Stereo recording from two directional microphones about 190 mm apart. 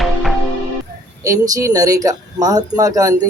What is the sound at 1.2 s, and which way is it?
Speech, 15° right (ahead or behind).